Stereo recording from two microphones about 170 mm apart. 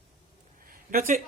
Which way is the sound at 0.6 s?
55° right (ahead or behind).